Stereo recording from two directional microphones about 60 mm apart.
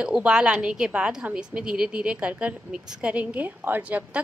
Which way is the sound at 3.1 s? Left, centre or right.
Right.